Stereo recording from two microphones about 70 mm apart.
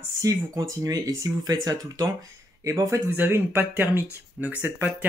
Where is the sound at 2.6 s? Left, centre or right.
Right.